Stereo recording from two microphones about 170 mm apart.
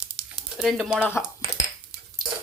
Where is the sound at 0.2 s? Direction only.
Centre (ahead or behind).